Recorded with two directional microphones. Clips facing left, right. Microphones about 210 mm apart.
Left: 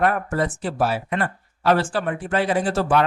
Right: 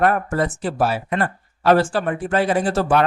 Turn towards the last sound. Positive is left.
turn(degrees=-45)  # may be behind; listen again after turning